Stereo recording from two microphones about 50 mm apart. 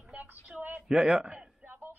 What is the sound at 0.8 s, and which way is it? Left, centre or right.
Speech, centre.